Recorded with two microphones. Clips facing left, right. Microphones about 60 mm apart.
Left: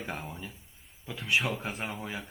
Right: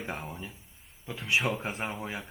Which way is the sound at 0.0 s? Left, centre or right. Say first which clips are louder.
Right 1 dB; centre.